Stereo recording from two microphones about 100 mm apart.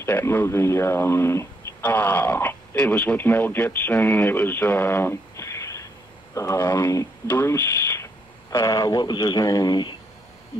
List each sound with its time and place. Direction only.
0.0 s speech: 25° left (ahead or behind); by 9.9 s 45° left (ahead or behind)